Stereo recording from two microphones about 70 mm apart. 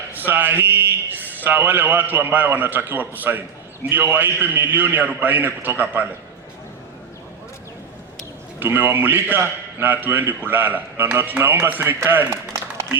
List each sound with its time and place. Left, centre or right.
0.2 s a man's voice: right
8.5 s a man's voice: right